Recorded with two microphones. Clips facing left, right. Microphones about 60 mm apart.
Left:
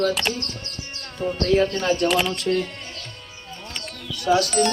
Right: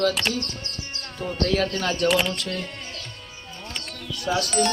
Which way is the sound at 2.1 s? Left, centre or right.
Centre.